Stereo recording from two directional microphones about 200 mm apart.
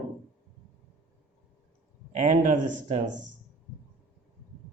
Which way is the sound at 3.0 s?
65° right (ahead or behind).